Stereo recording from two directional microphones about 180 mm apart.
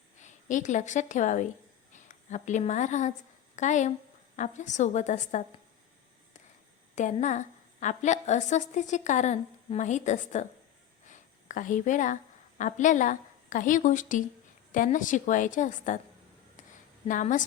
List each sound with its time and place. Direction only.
0.2 s a woman's voice: 45° left (ahead or behind)
6.9 s a woman's voice: 40° left (ahead or behind)
17.1 s a woman's voice: 45° left (ahead or behind)